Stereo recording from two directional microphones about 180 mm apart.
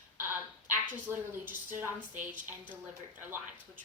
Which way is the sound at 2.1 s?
50° right (ahead or behind).